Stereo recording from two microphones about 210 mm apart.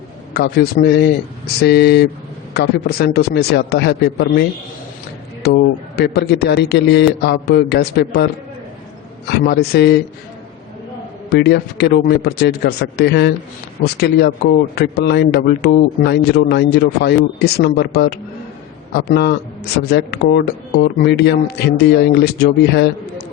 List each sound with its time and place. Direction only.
0.3 s a man's voice: 50° left (ahead or behind)
5.4 s a man's voice: 50° left (ahead or behind)
11.3 s a man's voice: 50° left (ahead or behind)